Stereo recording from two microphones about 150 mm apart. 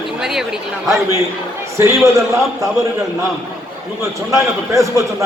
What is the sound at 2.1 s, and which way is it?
Speech, 20° right (ahead or behind).